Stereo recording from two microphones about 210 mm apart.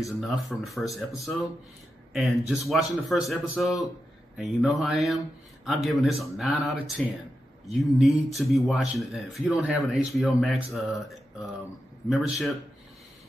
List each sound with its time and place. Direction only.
0.0 s speech: centre (ahead or behind)